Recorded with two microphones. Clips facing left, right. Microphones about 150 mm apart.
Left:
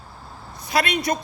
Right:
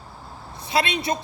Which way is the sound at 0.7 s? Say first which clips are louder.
Left 1 dB; 25° right (ahead or behind).